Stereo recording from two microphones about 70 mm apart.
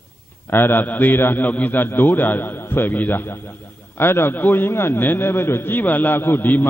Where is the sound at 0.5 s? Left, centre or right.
Left.